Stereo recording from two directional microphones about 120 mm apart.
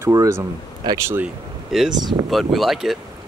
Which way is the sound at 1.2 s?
5° right (ahead or behind).